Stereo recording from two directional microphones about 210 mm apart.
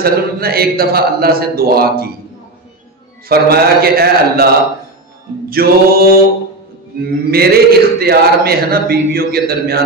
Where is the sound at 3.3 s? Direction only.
45° right (ahead or behind).